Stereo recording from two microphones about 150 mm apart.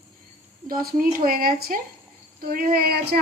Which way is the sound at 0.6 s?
70° right (ahead or behind).